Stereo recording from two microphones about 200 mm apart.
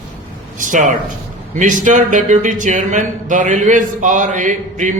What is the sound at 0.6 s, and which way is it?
Speech, 40° right (ahead or behind).